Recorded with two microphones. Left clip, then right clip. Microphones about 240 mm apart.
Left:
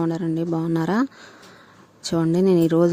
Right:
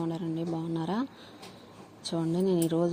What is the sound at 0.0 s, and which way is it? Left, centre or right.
Speech, left.